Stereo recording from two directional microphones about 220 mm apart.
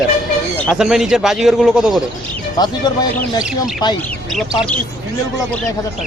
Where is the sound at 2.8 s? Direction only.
20° left (ahead or behind).